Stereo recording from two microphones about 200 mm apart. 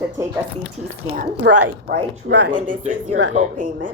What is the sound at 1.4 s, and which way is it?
Speech, 60° right (ahead or behind).